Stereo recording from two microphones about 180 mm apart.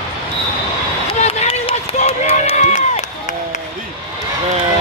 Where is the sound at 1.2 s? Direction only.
35° left (ahead or behind).